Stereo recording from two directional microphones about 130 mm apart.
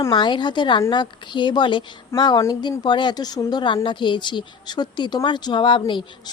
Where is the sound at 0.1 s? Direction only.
35° left (ahead or behind).